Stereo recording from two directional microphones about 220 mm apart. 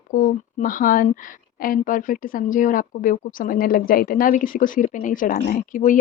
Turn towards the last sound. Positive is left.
turn(degrees=35)  # may be behind; listen again after turning